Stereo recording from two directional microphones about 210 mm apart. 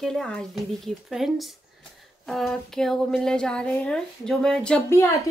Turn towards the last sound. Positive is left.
turn(degrees=15)  # may be behind; listen again after turning